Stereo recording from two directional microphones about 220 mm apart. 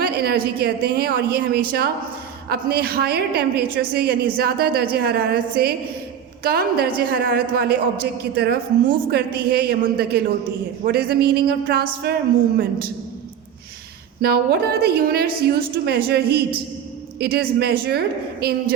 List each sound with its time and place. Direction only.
0.0 s a woman's voice: 45° right (ahead or behind)
14.2 s a woman's voice: 45° right (ahead or behind)